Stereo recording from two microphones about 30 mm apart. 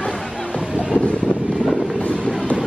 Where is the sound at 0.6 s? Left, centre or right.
Right.